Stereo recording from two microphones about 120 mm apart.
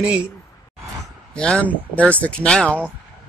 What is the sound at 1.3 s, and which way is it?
Speech, 10° left (ahead or behind).